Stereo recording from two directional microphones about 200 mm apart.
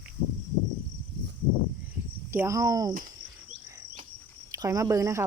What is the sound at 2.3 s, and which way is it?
Speech, 15° right (ahead or behind).